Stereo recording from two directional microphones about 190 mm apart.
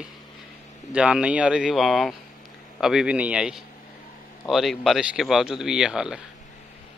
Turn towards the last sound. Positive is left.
turn(degrees=-5)  # may be behind; listen again after turning